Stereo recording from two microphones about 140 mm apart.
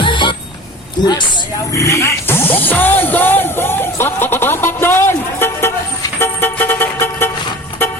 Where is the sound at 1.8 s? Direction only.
20° left (ahead or behind).